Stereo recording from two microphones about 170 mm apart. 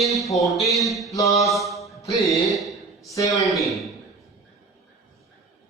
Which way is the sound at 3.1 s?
20° left (ahead or behind).